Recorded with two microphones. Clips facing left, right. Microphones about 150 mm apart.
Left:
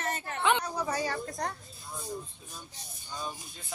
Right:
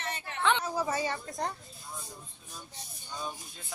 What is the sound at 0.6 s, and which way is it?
Speech, 5° right (ahead or behind).